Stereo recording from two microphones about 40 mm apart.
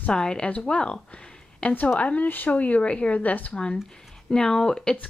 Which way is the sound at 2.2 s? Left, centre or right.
Left.